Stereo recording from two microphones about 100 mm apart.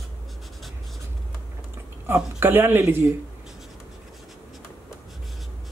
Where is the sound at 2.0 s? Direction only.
20° right (ahead or behind).